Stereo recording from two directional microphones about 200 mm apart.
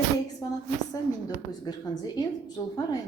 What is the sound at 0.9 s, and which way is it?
A woman's voice, 20° left (ahead or behind).